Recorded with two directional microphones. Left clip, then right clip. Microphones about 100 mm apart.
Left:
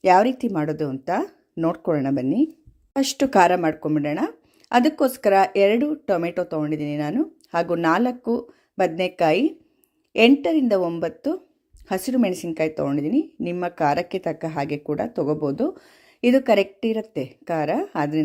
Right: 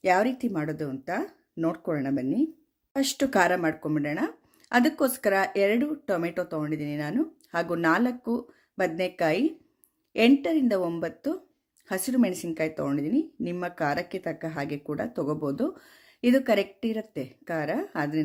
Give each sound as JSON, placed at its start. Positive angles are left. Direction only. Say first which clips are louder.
{"t": 0.0, "sound": "a woman's voice", "louder": "left 7 dB", "side_deg": 45}
{"t": 1.5, "sound": "speech", "louder": "left 5 dB", "side_deg": 30}
{"t": 1.8, "sound": "a woman's voice", "louder": "left 6 dB", "side_deg": 45}
{"t": 2.9, "sound": "speech", "louder": "left 6 dB", "side_deg": 35}